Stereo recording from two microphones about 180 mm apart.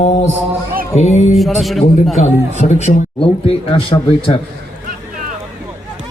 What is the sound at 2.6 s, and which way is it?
A man's voice, 40° left (ahead or behind).